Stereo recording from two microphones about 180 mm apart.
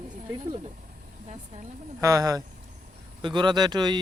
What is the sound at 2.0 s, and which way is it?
A man's voice, 20° right (ahead or behind).